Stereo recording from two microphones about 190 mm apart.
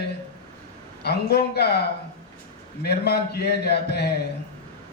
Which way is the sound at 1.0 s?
60° left (ahead or behind).